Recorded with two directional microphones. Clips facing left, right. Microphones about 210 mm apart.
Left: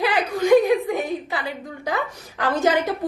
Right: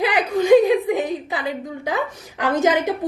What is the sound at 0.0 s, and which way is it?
A woman's voice, 20° right (ahead or behind).